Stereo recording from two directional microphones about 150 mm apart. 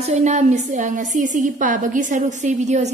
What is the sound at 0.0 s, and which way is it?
A woman's voice, 50° right (ahead or behind).